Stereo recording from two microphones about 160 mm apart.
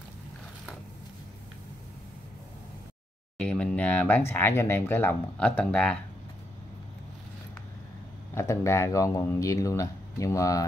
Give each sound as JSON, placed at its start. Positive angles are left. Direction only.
{"t": 3.3, "sound": "speech", "side_deg": 5}
{"t": 8.4, "sound": "speech", "side_deg": 15}